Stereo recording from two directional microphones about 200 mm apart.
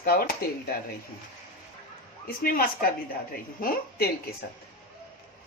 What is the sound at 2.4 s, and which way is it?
Speech, 50° left (ahead or behind).